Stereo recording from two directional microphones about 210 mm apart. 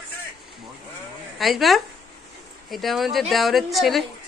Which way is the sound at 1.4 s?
Centre (ahead or behind).